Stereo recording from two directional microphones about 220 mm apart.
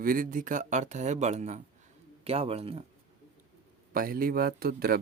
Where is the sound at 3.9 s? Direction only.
40° right (ahead or behind).